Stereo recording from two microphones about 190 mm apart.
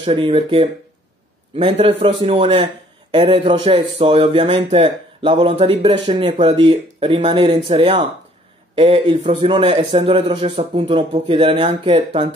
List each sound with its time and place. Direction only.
0.0 s a man's voice: 25° right (ahead or behind)